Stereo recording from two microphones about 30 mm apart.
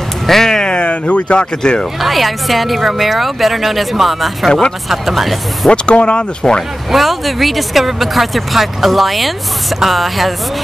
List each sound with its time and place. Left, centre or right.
0.3 s speech: centre
0.7 s speech: left
1.6 s speech: left
2.0 s speech: centre
4.5 s speech: left
4.8 s speech: centre
5.7 s speech: left
6.9 s speech: centre